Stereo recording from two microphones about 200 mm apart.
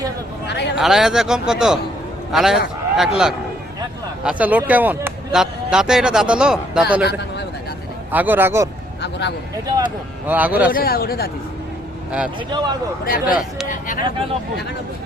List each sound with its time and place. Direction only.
0.4 s a sound: 55° left (ahead or behind)
0.8 s speech: centre (ahead or behind)
4.2 s speech: 5° right (ahead or behind)
7.0 s a man's voice: 55° left (ahead or behind)
8.1 s speech: 10° right (ahead or behind)
9.0 s speech: 60° left (ahead or behind)
9.6 s speech: 20° right (ahead or behind)
10.2 s speech: 10° right (ahead or behind)
10.7 s speech: 45° left (ahead or behind)
12.5 s speech: 20° right (ahead or behind)
13.1 s speech: 45° left (ahead or behind)